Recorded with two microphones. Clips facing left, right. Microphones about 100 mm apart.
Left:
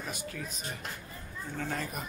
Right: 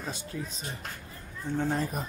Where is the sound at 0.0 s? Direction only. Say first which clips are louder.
Right 2 dB; 25° right (ahead or behind).